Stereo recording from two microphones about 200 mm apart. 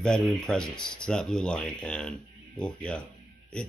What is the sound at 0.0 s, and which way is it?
Speech, 5° left (ahead or behind).